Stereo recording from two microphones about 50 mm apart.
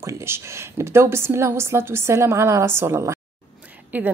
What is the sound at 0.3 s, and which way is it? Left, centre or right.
A woman's voice, right.